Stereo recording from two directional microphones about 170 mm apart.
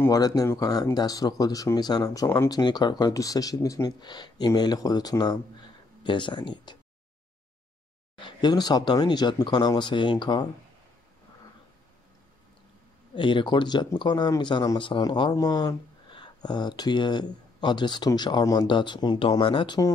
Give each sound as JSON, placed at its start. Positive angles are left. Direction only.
{"t": 0.0, "sound": "speech", "side_deg": 20}
{"t": 8.2, "sound": "speech", "side_deg": 25}
{"t": 13.1, "sound": "speech", "side_deg": 30}